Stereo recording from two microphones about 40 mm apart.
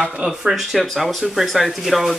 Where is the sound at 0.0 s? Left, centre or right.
Right.